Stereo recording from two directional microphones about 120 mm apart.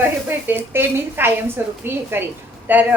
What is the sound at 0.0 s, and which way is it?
A woman's voice, 15° right (ahead or behind).